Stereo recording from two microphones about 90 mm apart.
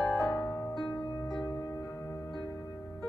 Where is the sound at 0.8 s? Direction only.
5° left (ahead or behind).